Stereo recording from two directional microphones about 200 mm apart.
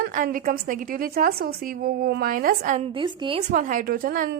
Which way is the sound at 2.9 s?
25° right (ahead or behind).